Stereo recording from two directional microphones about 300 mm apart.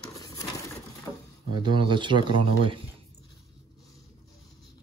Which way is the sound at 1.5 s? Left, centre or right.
Centre.